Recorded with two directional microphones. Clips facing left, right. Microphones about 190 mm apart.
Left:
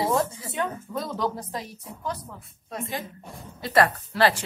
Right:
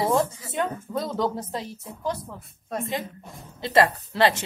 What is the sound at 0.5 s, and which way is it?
A woman's voice, 25° right (ahead or behind).